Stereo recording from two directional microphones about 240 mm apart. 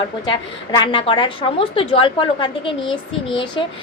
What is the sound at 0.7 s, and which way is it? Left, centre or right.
A woman's voice, centre.